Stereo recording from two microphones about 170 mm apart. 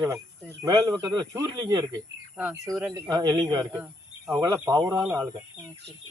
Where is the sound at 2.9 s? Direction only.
25° right (ahead or behind).